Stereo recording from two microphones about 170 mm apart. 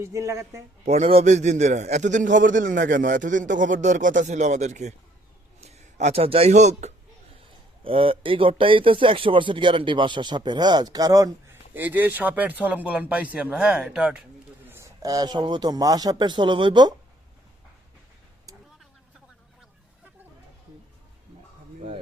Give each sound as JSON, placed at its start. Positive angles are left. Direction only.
{"t": 0.0, "sound": "speech", "side_deg": -15}
{"t": 0.9, "sound": "a man's voice", "side_deg": -40}
{"t": 14.7, "sound": "speech", "side_deg": -20}